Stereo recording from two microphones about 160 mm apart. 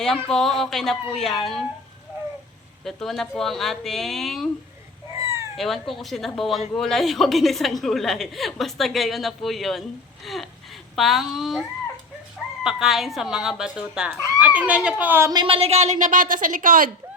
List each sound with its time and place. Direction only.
0.0 s a woman's voice: 5° left (ahead or behind)
2.8 s a woman's voice: centre (ahead or behind)
5.1 s cat: 20° right (ahead or behind)
5.5 s a woman's voice: centre (ahead or behind)
12.6 s a woman's voice: centre (ahead or behind)
15.3 s a woman's voice: 30° right (ahead or behind); by 16.9 s 60° right (ahead or behind)